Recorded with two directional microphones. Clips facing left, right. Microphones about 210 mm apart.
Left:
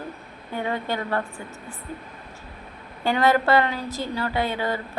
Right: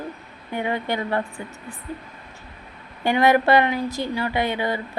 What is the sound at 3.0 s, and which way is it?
A woman's voice, 15° right (ahead or behind).